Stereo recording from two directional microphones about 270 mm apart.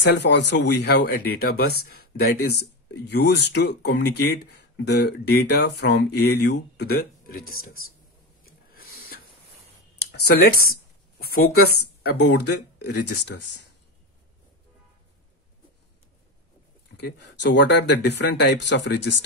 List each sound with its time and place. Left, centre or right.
0.1 s speech: left
10.1 s speech: left
16.9 s speech: left